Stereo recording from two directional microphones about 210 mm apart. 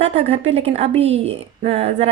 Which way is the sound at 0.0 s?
30° right (ahead or behind).